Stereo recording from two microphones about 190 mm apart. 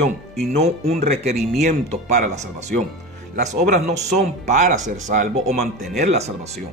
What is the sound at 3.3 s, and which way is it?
Speech, 40° right (ahead or behind).